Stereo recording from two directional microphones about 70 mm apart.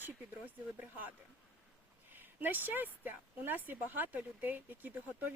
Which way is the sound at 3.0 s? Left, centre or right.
Right.